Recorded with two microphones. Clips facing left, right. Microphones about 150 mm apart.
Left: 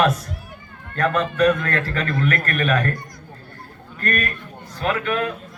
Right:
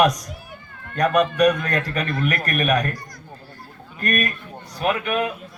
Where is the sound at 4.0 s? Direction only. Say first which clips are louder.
Right 1 dB; 15° right (ahead or behind).